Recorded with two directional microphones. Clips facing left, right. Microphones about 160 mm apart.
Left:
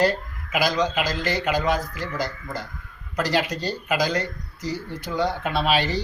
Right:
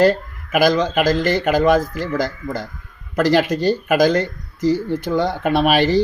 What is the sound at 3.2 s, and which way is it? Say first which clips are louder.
Speech: right 8 dB; 50° right (ahead or behind).